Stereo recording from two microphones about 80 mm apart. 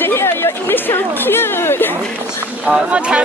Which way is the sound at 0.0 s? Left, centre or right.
Left.